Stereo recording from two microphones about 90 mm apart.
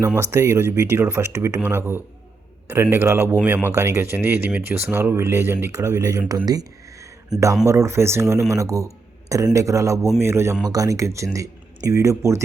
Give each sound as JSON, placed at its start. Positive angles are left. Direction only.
{"t": 0.2, "sound": "speech", "side_deg": -30}
{"t": 2.9, "sound": "speech", "side_deg": -30}
{"t": 3.7, "sound": "speech", "side_deg": -30}
{"t": 10.6, "sound": "speech", "side_deg": -40}